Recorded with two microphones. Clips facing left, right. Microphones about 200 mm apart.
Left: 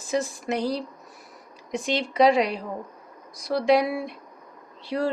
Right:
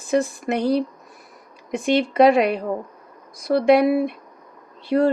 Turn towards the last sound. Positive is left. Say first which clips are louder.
# right 8 dB
turn(degrees=-55)  # may be behind; listen again after turning